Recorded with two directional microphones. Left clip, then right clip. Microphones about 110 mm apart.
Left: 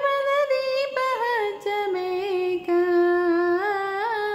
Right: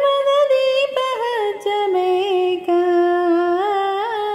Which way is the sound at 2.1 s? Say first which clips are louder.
Right 7 dB; 5° right (ahead or behind).